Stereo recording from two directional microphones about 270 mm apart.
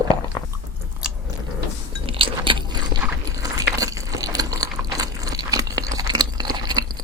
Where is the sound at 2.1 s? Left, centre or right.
Centre.